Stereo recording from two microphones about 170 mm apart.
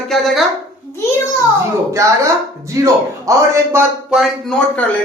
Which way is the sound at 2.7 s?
20° right (ahead or behind).